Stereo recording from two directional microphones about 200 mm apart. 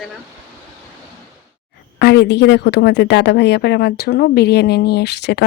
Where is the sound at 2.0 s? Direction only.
60° left (ahead or behind).